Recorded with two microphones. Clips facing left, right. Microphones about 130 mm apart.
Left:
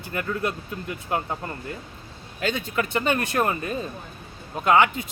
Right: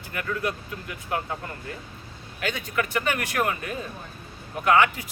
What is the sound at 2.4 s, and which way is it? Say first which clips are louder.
Speech: left 2 dB; 30° left (ahead or behind).